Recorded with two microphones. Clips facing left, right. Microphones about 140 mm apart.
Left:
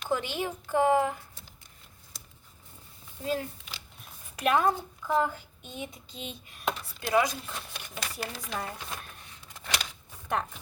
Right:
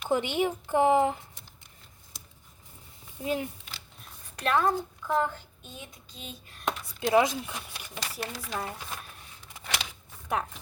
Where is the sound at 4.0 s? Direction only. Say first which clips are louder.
Left 3 dB; 10° left (ahead or behind).